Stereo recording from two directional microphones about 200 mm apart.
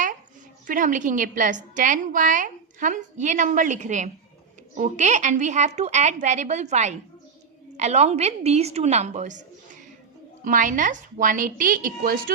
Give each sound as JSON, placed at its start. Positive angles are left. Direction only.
{"t": 0.7, "sound": "a woman's voice", "side_deg": -40}
{"t": 10.4, "sound": "a woman's voice", "side_deg": -40}